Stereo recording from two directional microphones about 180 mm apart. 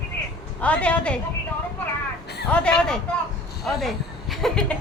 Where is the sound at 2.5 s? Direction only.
5° left (ahead or behind).